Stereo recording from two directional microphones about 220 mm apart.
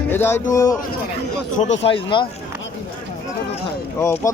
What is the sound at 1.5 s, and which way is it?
Speech, 30° left (ahead or behind).